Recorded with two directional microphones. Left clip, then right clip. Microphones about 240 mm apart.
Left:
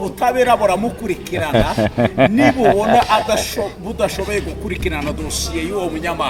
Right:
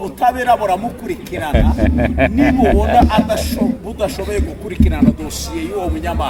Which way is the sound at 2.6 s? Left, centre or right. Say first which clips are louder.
Left 1 dB; left.